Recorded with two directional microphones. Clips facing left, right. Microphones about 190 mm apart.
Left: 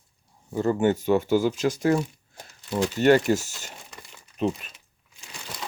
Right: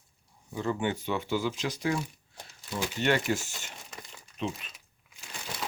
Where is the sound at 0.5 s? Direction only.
45° left (ahead or behind).